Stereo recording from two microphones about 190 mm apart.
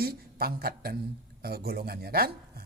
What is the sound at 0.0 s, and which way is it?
A man's voice, 55° right (ahead or behind).